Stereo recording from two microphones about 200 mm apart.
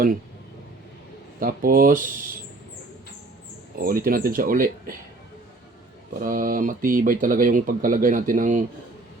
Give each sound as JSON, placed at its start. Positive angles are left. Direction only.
{"t": 1.4, "sound": "speech", "side_deg": -45}
{"t": 3.8, "sound": "speech", "side_deg": -45}
{"t": 6.1, "sound": "speech", "side_deg": -45}